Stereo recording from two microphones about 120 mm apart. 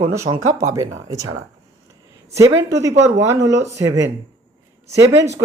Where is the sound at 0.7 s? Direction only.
30° right (ahead or behind).